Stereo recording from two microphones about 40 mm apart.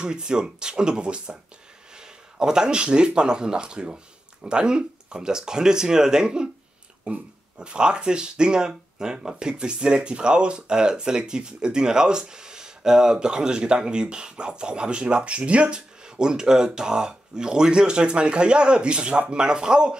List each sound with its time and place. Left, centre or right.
0.0 s speech: right
16.2 s speech: centre